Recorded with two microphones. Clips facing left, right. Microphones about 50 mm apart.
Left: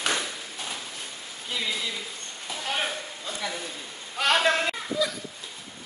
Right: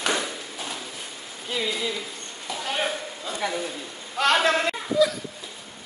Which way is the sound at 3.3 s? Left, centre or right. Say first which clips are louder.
Right 5 dB; centre.